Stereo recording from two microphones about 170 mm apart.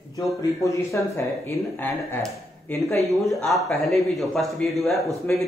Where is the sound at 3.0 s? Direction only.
Centre (ahead or behind).